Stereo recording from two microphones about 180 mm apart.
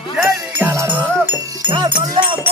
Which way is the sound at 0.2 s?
15° right (ahead or behind).